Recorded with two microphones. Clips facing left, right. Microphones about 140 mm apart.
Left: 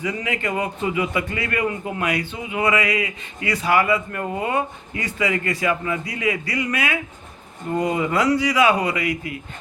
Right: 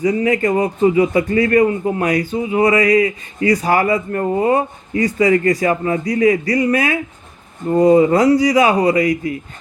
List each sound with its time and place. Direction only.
0.0 s a man's voice: 35° right (ahead or behind)